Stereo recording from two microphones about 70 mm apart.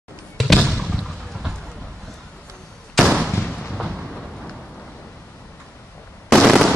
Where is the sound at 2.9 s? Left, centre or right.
Centre.